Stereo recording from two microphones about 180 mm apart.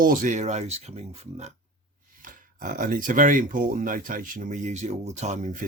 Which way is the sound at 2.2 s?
50° right (ahead or behind).